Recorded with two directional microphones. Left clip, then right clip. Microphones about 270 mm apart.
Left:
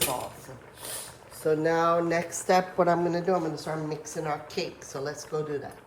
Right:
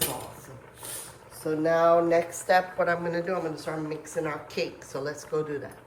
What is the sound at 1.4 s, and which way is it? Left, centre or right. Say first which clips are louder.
Speech: right 1 dB; left.